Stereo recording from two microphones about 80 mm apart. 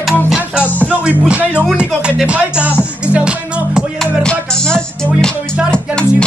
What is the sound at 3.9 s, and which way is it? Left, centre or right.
Music, centre.